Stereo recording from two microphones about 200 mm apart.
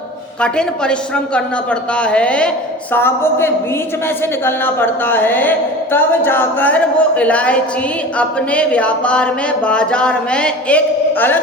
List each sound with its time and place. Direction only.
0.4 s a woman's voice: 5° left (ahead or behind)